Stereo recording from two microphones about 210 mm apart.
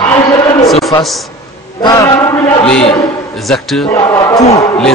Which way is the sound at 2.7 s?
Centre (ahead or behind).